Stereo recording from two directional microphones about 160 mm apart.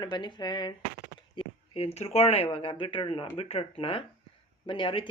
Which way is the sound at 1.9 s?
40° left (ahead or behind).